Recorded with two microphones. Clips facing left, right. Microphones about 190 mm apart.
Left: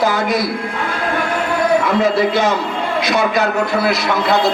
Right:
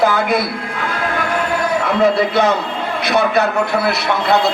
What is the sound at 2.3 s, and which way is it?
Speech, 60° right (ahead or behind).